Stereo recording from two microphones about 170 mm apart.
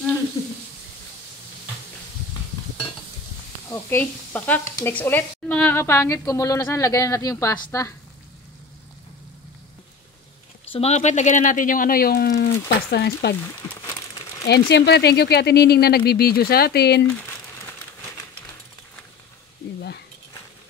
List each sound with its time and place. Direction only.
3.7 s speech: 10° left (ahead or behind)
10.7 s speech: 40° left (ahead or behind); by 13.4 s 75° left (ahead or behind)
13.4 s speech: 15° left (ahead or behind)
14.5 s speech: 80° left